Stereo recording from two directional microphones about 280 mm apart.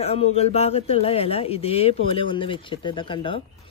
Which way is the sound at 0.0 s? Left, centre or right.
Left.